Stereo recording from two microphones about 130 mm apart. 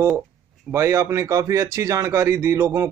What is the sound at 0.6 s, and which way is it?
Speech, 20° right (ahead or behind).